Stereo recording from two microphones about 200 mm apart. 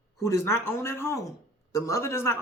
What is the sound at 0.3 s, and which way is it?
A woman's voice, 15° left (ahead or behind).